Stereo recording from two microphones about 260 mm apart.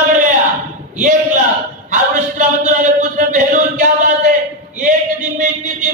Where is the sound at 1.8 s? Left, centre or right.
Right.